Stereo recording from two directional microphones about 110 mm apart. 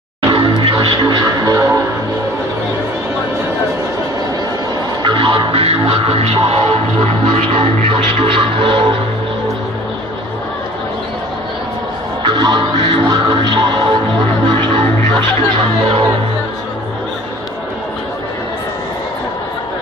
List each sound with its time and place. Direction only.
0.3 s music: 50° right (ahead or behind)
1.2 s music: 35° right (ahead or behind)
5.0 s music: 50° right (ahead or behind)
12.3 s music: 40° right (ahead or behind)